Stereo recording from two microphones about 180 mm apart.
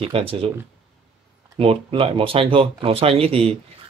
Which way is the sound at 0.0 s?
30° right (ahead or behind).